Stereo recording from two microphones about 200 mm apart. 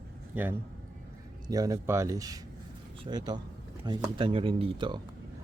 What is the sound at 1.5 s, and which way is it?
Speech, 20° right (ahead or behind).